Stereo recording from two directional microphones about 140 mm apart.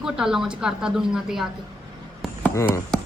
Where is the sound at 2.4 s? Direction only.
20° left (ahead or behind).